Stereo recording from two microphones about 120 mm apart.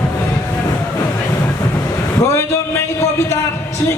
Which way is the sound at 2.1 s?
25° left (ahead or behind).